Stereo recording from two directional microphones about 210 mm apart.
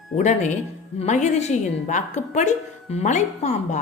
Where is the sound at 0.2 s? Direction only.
35° left (ahead or behind).